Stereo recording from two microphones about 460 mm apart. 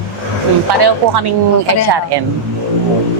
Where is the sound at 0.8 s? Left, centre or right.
Right.